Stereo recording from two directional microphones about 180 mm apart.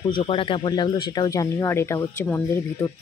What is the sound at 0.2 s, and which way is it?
Speech, 30° left (ahead or behind).